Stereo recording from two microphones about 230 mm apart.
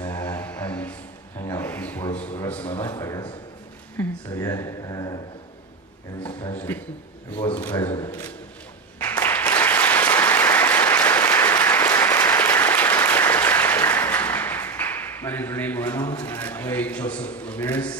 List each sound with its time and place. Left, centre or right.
0.0 s music: centre
1.4 s a sound: centre
4.0 s speech: centre
6.2 s a man's voice: left
7.6 s speech: centre
9.0 s applause: centre